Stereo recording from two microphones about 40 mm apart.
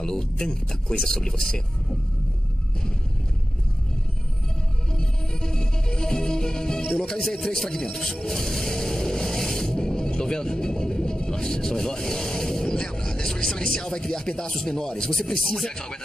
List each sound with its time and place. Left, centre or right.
0.0 s speech: centre
4.9 s music: centre
15.3 s speech: centre
15.6 s speech: centre